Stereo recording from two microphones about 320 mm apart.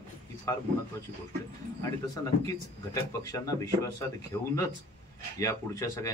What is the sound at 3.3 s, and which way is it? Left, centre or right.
Speech, centre.